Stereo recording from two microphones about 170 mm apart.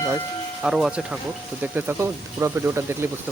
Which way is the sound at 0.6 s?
5° right (ahead or behind).